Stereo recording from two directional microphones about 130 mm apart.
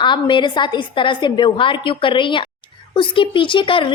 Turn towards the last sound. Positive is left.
turn(degrees=40)  # may be behind; listen again after turning